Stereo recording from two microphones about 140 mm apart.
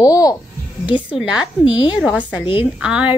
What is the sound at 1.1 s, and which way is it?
Speech, 5° right (ahead or behind).